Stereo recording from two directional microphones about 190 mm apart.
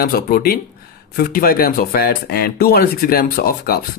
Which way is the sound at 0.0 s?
50° left (ahead or behind).